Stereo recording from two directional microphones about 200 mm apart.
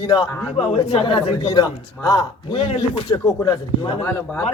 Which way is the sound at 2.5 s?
30° left (ahead or behind).